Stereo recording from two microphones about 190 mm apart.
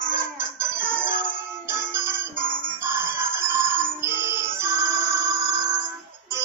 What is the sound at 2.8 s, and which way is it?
Fowl, 10° right (ahead or behind).